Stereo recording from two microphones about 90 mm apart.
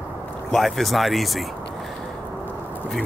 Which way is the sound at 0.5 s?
Centre (ahead or behind).